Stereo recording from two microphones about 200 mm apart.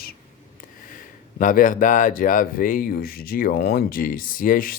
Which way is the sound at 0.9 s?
40° left (ahead or behind).